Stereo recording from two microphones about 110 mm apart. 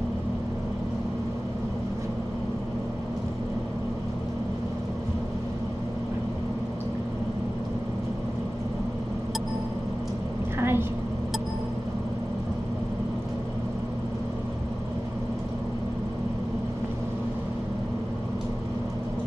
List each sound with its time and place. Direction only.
10.6 s vehicle: 20° right (ahead or behind)